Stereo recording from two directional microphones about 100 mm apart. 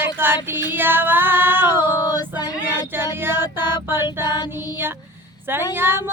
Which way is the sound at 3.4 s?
45° left (ahead or behind).